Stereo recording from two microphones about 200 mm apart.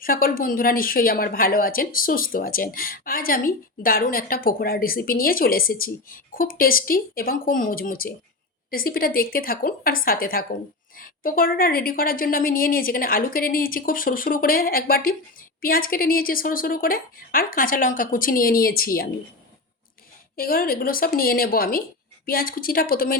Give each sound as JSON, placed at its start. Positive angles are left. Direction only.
{"t": 0.0, "sound": "speech", "side_deg": 45}
{"t": 20.3, "sound": "speech", "side_deg": 45}